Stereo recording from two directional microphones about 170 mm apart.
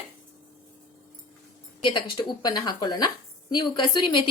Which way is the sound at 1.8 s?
25° left (ahead or behind).